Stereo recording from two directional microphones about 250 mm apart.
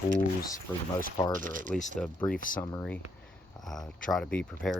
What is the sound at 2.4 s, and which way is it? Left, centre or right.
Speech, left.